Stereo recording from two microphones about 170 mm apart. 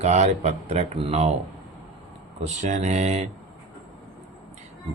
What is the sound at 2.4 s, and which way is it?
Speech, 45° right (ahead or behind).